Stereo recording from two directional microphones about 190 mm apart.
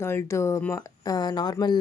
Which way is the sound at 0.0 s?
15° left (ahead or behind).